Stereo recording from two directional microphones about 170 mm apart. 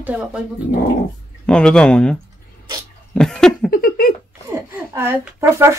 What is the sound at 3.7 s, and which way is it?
Giggle, 60° left (ahead or behind).